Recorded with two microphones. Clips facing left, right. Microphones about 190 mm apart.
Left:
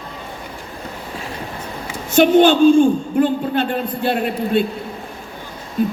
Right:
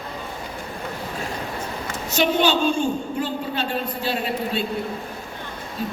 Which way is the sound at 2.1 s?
55° left (ahead or behind).